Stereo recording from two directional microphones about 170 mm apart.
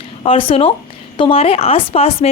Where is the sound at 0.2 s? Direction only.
30° left (ahead or behind).